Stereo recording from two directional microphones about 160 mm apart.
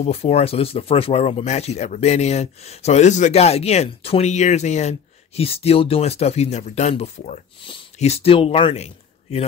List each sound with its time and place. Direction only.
0.0 s speech: 40° left (ahead or behind)